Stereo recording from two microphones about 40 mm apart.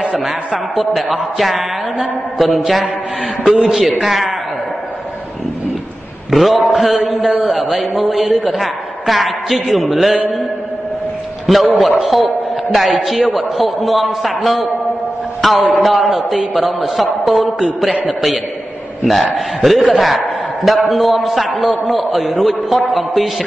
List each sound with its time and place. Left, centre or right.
0.1 s a man's voice: centre
0.7 s a man's voice: centre
6.3 s a man's voice: centre
11.4 s a man's voice: centre